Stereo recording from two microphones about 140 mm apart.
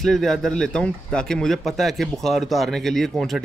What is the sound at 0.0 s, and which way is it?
Speech, centre (ahead or behind).